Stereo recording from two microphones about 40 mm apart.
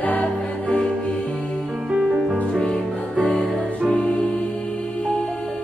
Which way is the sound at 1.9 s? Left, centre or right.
Right.